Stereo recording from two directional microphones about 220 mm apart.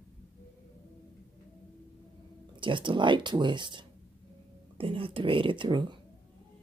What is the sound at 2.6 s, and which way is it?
Speech, 20° right (ahead or behind).